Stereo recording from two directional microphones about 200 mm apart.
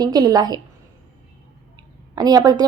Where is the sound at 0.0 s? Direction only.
20° right (ahead or behind).